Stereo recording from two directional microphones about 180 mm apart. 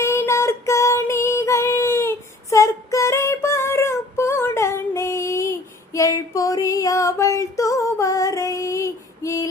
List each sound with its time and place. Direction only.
0.0 s female singing: 15° left (ahead or behind)